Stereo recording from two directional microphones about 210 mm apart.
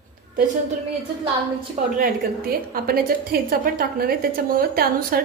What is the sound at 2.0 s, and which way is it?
A woman's voice, 45° right (ahead or behind).